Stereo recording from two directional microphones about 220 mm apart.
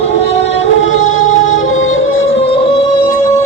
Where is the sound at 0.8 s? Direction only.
65° left (ahead or behind).